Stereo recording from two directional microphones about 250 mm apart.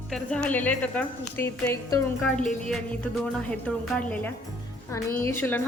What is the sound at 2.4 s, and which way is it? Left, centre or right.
Music, left.